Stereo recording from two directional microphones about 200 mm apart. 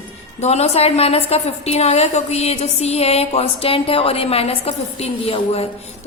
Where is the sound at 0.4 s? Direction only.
30° left (ahead or behind).